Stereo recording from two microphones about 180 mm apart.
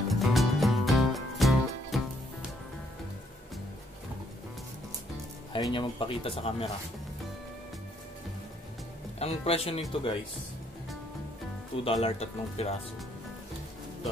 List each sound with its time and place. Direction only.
0.1 s music: centre (ahead or behind)
5.5 s speech: 25° left (ahead or behind)
9.2 s speech: 35° left (ahead or behind)
11.7 s speech: 30° left (ahead or behind)